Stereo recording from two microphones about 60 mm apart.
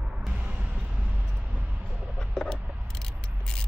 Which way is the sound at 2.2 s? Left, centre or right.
Centre.